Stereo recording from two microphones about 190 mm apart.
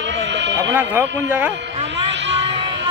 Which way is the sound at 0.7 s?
10° right (ahead or behind).